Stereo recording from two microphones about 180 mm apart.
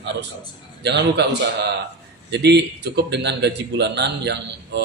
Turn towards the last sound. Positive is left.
turn(degrees=-70)  # may be behind; listen again after turning